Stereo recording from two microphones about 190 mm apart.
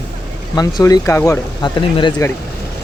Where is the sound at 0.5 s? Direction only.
20° left (ahead or behind).